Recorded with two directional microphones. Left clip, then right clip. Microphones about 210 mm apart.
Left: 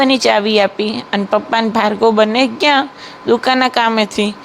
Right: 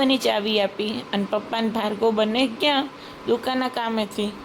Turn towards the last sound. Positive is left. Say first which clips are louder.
# left 11 dB
turn(degrees=20)  # may be behind; listen again after turning